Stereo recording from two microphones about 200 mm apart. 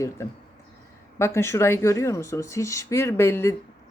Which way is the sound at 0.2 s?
15° left (ahead or behind).